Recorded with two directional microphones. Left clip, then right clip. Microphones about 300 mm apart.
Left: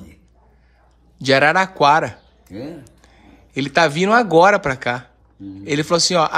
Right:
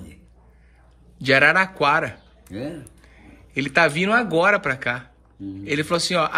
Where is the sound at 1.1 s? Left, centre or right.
Centre.